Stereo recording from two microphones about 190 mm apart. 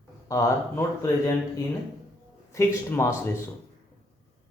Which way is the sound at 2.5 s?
15° left (ahead or behind).